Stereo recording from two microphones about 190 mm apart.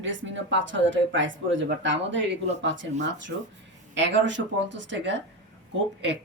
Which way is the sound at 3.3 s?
75° right (ahead or behind).